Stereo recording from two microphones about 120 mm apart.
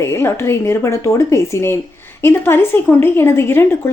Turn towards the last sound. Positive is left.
turn(degrees=20)  # may be behind; listen again after turning